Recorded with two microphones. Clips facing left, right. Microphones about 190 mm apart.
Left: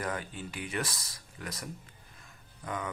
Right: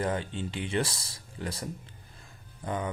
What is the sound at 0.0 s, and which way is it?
Speech, 25° right (ahead or behind).